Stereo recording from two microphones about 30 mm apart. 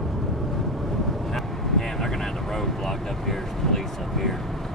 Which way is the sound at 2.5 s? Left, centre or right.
Centre.